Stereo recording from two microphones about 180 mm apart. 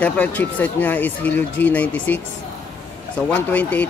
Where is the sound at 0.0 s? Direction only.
10° left (ahead or behind).